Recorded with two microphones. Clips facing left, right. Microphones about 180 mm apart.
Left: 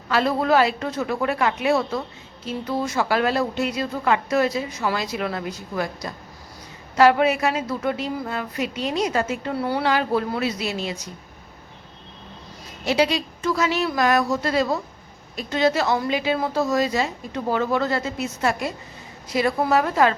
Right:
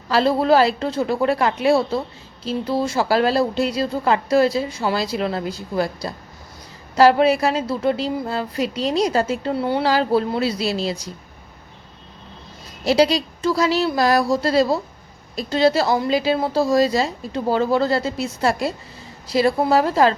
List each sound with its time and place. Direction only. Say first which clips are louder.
0.1 s a woman's voice: right 3 dB; 30° right (ahead or behind)
12.8 s a woman's voice: right 4 dB; 35° right (ahead or behind)